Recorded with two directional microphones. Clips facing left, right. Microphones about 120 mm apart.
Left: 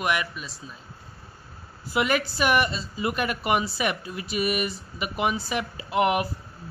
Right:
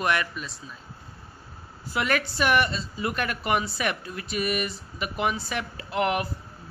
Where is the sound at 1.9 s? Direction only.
5° left (ahead or behind).